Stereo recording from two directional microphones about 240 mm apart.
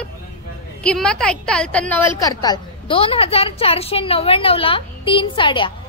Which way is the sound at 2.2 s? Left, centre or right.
Centre.